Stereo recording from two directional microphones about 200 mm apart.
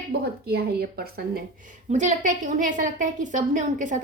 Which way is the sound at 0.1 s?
50° right (ahead or behind).